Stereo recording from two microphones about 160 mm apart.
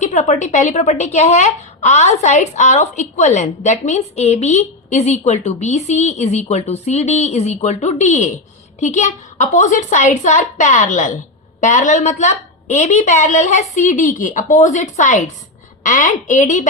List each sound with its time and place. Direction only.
0.0 s speech: 50° left (ahead or behind)